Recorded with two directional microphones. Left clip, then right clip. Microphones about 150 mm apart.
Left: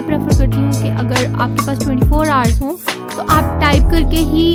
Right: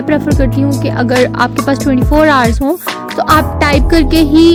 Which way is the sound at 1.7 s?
30° right (ahead or behind).